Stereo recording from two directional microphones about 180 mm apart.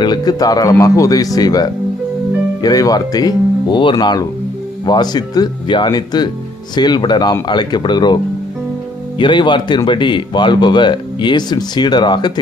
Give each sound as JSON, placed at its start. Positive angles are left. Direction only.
{"t": 0.0, "sound": "speech", "side_deg": 25}
{"t": 9.2, "sound": "speech", "side_deg": 25}